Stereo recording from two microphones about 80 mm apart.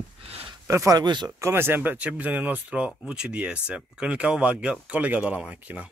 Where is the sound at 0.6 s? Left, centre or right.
Right.